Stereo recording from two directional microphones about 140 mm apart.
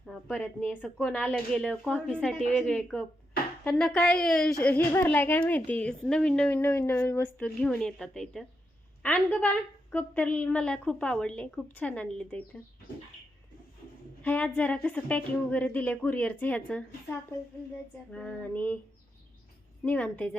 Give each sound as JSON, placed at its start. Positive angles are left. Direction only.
{"t": 0.0, "sound": "a woman's voice", "side_deg": 5}
{"t": 14.2, "sound": "a woman's voice", "side_deg": 10}
{"t": 19.8, "sound": "a woman's voice", "side_deg": 10}